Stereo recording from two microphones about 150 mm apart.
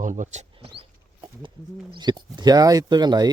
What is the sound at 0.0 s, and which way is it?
Speech, 55° right (ahead or behind).